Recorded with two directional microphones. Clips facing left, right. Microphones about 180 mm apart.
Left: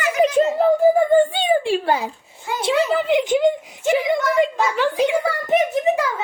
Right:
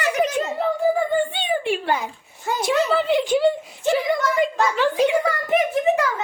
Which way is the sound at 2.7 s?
15° left (ahead or behind).